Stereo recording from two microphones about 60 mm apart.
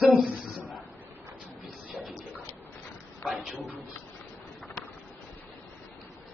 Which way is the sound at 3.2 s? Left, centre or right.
Centre.